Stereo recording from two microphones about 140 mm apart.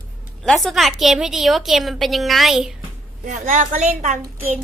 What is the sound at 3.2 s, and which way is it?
Speech, 65° right (ahead or behind).